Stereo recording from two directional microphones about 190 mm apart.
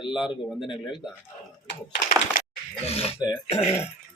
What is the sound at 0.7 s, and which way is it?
Speech, 25° left (ahead or behind).